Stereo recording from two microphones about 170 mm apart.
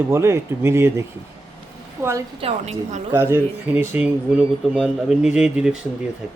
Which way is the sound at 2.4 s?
40° right (ahead or behind).